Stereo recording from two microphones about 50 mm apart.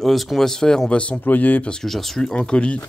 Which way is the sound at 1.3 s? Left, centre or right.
Left.